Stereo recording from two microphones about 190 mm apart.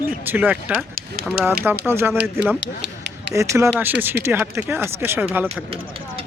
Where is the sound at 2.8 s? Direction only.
65° right (ahead or behind).